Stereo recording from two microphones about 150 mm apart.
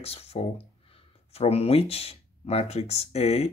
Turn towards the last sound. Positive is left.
turn(degrees=45)  # may be behind; listen again after turning